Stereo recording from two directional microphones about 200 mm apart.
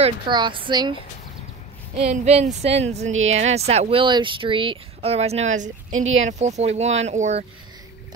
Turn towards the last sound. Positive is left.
turn(degrees=-35)  # may be behind; listen again after turning